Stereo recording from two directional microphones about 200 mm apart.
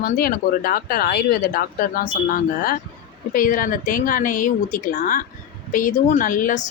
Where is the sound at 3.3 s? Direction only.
45° left (ahead or behind).